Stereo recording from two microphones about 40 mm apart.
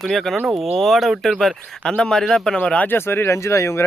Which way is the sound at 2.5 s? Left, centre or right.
Left.